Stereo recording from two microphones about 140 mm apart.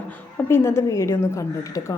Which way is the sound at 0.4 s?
15° left (ahead or behind).